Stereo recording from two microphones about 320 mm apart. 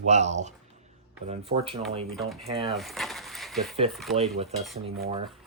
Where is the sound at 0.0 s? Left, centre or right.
Right.